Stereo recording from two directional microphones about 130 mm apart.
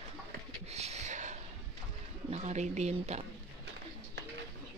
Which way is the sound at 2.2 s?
60° right (ahead or behind).